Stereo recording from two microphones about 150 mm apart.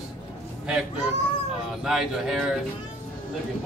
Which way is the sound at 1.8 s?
5° right (ahead or behind).